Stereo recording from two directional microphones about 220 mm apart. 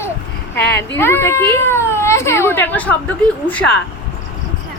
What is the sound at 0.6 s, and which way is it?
Speech, 50° left (ahead or behind).